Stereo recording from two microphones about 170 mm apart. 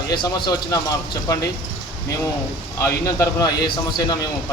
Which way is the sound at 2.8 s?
20° left (ahead or behind).